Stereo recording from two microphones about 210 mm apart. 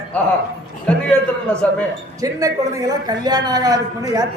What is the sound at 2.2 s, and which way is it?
A man's voice, 15° right (ahead or behind).